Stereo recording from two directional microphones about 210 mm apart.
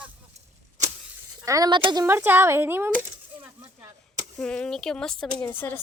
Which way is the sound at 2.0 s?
10° right (ahead or behind).